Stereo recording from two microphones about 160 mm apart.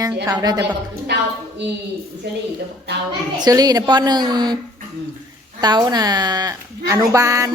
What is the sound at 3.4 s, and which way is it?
A woman's voice, 25° right (ahead or behind).